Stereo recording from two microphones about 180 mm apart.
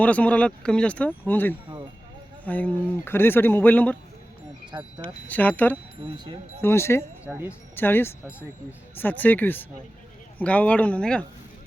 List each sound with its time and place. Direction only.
0.0 s speech: 5° left (ahead or behind)
4.7 s speech: 25° right (ahead or behind)
5.0 s speech: 10° left (ahead or behind)
7.3 s speech: 10° right (ahead or behind)
7.8 s speech: 10° left (ahead or behind)